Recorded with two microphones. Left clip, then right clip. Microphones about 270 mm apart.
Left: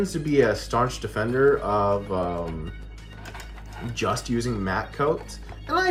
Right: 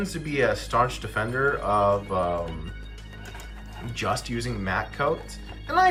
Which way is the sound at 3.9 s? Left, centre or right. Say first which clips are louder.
Left 2 dB; centre.